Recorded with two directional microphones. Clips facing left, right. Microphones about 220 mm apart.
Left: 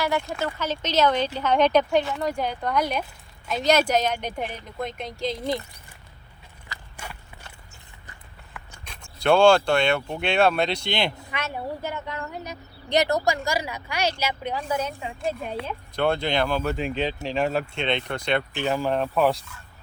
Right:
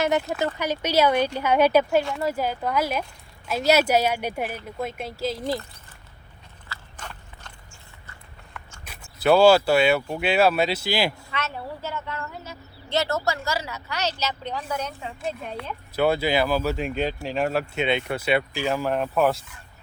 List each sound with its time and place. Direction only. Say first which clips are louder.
0.6 s speech: right 1 dB; 10° right (ahead or behind)
6.7 s horse: left 1 dB; 10° left (ahead or behind)
8.8 s speech: right 2 dB; 5° right (ahead or behind)
11.3 s a woman's voice: left 1 dB; 15° left (ahead or behind); by 19.4 s 5° right (ahead or behind)